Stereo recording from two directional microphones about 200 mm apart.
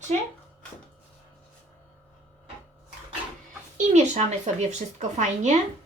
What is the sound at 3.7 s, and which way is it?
Speech, 35° right (ahead or behind).